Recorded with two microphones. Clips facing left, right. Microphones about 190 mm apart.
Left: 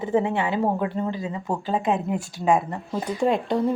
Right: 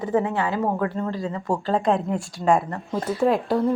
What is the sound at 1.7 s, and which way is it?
A woman's voice, 5° left (ahead or behind).